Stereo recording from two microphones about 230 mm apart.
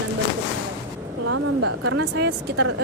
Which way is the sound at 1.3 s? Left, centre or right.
Right.